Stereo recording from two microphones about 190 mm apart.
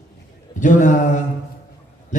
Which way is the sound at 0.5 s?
40° left (ahead or behind).